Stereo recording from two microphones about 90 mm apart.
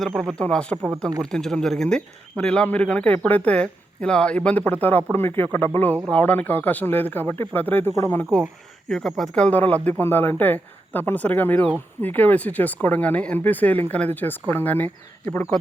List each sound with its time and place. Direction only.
0.1 s speech: 5° right (ahead or behind)
0.3 s speech: 15° left (ahead or behind)
7.9 s speech: 35° left (ahead or behind)
8.9 s speech: 5° left (ahead or behind); by 14.8 s 20° left (ahead or behind)